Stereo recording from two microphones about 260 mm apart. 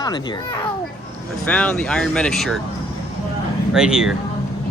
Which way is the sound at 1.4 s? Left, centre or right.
Centre.